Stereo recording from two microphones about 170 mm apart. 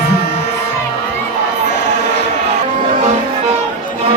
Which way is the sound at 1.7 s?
80° left.